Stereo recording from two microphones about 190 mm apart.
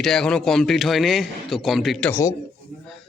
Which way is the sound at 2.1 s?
15° left (ahead or behind).